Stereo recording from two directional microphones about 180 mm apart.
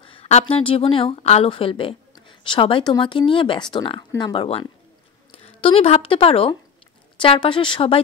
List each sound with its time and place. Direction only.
0.0 s speech: 30° left (ahead or behind)